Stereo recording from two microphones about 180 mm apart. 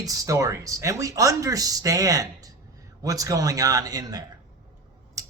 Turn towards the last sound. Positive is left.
turn(degrees=-20)  # may be behind; listen again after turning